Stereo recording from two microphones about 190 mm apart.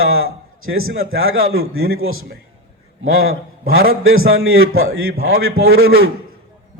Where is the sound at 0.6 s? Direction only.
90° right.